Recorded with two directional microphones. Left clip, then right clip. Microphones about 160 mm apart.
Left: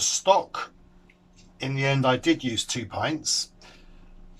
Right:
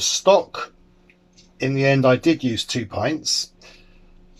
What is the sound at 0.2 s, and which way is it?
Speech, 35° right (ahead or behind).